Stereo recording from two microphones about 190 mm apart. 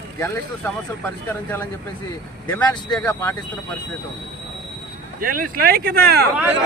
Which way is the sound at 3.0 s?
15° left (ahead or behind).